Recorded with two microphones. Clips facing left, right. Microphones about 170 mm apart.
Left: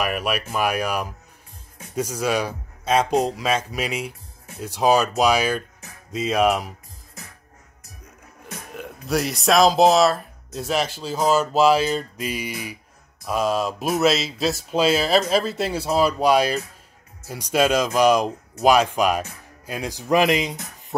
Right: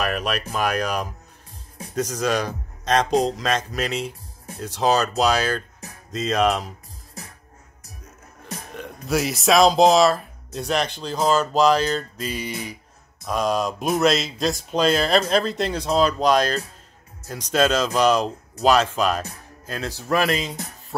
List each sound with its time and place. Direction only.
0.0 s speech: 10° left (ahead or behind)
8.7 s speech: centre (ahead or behind)